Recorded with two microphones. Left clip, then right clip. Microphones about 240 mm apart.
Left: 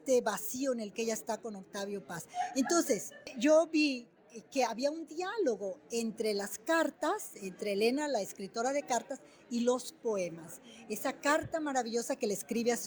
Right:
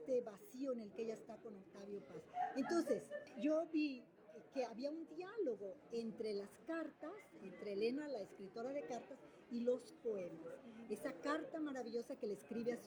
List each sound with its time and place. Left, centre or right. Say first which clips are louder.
0.0 s a woman's voice: left 12 dB; left